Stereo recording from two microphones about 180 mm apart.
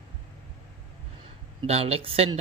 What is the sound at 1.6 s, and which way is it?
Speech, 35° right (ahead or behind).